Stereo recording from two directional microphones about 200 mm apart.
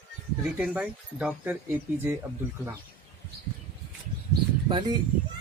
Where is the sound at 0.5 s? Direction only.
5° right (ahead or behind).